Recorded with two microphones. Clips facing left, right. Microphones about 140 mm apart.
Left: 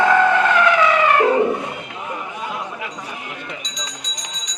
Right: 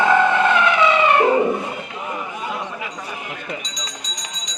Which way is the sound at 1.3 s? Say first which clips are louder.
Even; centre (ahead or behind).